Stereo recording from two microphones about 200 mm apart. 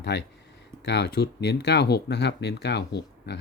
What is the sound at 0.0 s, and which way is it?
Speech, 55° left (ahead or behind).